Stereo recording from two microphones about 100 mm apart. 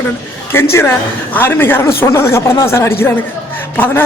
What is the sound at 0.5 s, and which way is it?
A woman's voice, 25° left (ahead or behind).